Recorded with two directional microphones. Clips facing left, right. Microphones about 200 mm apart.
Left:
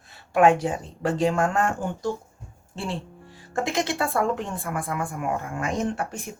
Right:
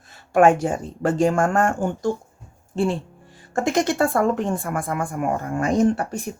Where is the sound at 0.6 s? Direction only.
50° right (ahead or behind).